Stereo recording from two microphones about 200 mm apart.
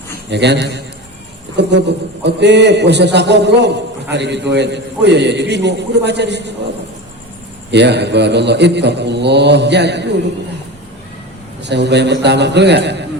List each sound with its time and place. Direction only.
0.3 s a man's voice: 60° right (ahead or behind)
7.7 s a man's voice: 60° right (ahead or behind)
11.6 s a man's voice: 60° right (ahead or behind)